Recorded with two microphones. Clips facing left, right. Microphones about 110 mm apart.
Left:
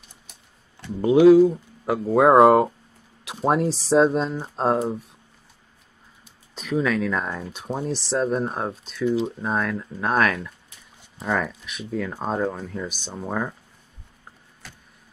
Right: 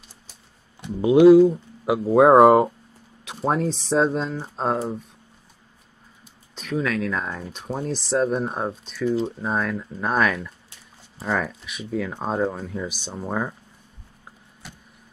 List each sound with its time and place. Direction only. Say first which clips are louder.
1.0 s speech: right 1 dB; centre (ahead or behind)
6.5 s speech: left 2 dB; 5° left (ahead or behind)
14.6 s vehicle: right 2 dB; 20° right (ahead or behind)